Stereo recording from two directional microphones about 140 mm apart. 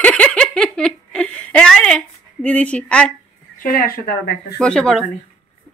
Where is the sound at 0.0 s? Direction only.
10° left (ahead or behind).